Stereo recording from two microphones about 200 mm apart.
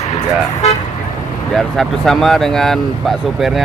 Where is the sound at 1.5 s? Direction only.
Centre (ahead or behind).